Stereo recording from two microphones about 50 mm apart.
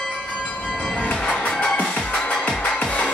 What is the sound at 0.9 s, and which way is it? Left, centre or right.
Music, left.